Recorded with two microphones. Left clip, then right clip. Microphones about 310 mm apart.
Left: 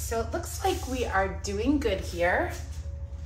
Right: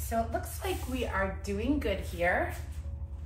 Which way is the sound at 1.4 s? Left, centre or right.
Left.